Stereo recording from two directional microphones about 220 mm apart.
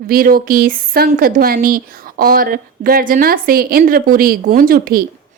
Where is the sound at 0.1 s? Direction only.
40° right (ahead or behind).